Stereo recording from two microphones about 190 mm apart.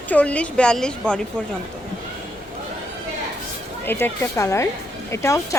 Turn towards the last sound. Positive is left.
turn(degrees=15)  # may be behind; listen again after turning